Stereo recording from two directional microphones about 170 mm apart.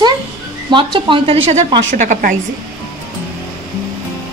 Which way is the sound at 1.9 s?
50° right (ahead or behind).